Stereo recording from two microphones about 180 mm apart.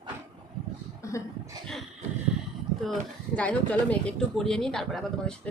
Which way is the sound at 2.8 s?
5° left (ahead or behind).